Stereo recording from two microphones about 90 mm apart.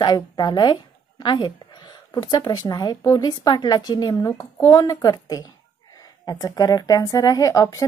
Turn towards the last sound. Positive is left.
turn(degrees=40)  # may be behind; listen again after turning